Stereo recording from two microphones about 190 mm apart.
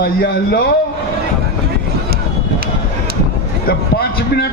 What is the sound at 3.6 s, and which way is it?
Speech, 55° left (ahead or behind).